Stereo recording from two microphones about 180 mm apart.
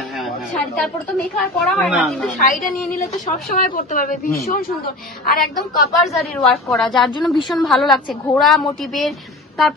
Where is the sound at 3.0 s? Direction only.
50° left (ahead or behind).